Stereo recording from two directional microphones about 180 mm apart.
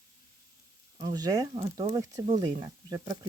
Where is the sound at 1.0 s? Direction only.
20° right (ahead or behind).